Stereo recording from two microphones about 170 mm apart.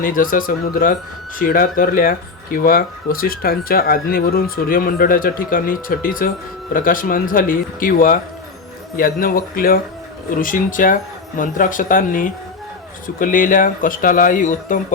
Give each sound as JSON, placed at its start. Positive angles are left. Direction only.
{"t": 0.0, "sound": "speech", "side_deg": 55}